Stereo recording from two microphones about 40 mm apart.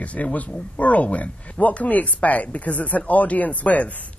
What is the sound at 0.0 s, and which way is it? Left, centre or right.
Speech, left.